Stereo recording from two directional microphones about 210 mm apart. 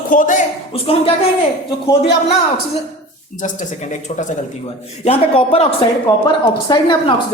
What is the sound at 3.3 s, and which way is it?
A woman's voice, 35° left (ahead or behind).